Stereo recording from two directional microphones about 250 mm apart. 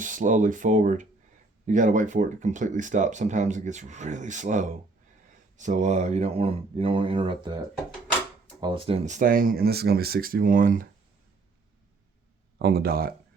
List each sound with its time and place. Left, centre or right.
0.0 s speech: right
8.6 s speech: right
12.5 s speech: right